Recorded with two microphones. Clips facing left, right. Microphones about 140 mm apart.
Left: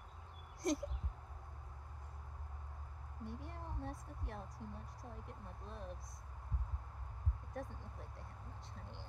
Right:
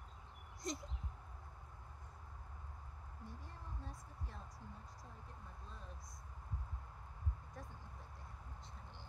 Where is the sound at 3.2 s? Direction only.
65° left (ahead or behind).